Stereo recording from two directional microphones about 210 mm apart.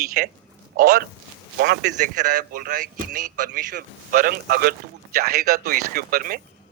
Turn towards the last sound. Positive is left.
turn(degrees=-45)  # may be behind; listen again after turning